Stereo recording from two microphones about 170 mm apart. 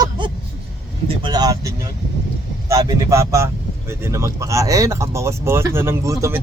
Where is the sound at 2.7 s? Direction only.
20° right (ahead or behind).